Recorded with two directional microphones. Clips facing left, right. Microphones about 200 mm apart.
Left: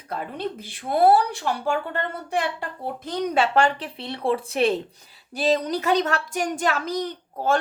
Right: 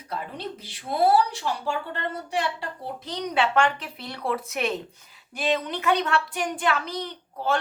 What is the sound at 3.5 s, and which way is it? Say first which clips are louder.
Speech: left 2 dB; 35° left (ahead or behind).